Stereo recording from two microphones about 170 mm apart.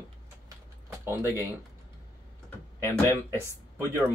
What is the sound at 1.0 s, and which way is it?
Speech, 15° right (ahead or behind).